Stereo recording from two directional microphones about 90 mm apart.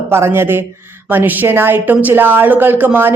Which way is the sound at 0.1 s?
25° right (ahead or behind).